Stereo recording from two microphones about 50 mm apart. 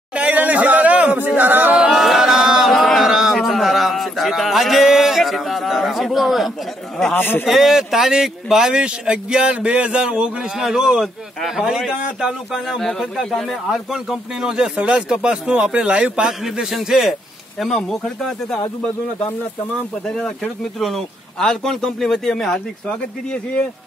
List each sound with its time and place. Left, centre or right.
0.1 s a sound: right
1.9 s a sound: centre
7.2 s speech: left
7.4 s speech: centre
12.8 s speech: centre
16.3 s speech: centre
17.6 s speech: centre
20.1 s speech: centre